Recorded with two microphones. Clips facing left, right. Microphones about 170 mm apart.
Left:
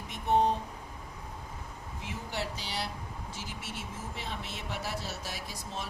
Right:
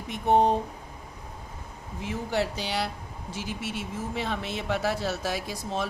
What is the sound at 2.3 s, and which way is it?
Speech, 75° right (ahead or behind).